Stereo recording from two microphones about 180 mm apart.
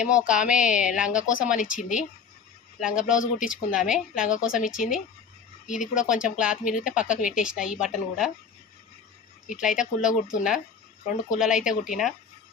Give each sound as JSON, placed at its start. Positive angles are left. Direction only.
{"t": 0.0, "sound": "a woman's voice", "side_deg": -5}
{"t": 1.5, "sound": "speech", "side_deg": 45}
{"t": 2.8, "sound": "a woman's voice", "side_deg": -5}
{"t": 9.5, "sound": "a woman's voice", "side_deg": -5}